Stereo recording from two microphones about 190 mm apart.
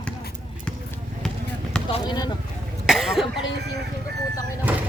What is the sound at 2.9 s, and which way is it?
Cough, centre (ahead or behind).